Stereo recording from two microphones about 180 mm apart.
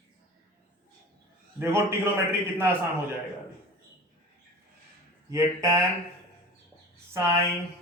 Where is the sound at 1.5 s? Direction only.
15° right (ahead or behind).